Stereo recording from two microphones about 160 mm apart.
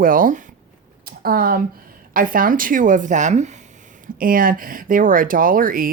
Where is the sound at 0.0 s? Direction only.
60° right (ahead or behind).